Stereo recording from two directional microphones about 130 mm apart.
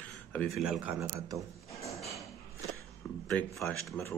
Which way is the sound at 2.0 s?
Centre (ahead or behind).